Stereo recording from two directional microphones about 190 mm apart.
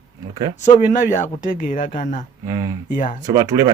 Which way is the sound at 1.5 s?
45° left (ahead or behind).